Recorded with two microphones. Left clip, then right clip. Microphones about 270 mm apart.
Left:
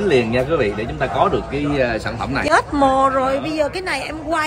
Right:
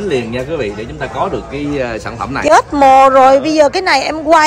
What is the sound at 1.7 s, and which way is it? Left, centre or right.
Speech, centre.